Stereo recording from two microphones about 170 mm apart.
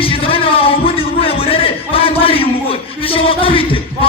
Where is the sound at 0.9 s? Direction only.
35° left (ahead or behind).